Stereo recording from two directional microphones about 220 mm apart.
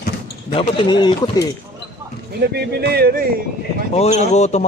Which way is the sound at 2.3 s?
45° right (ahead or behind).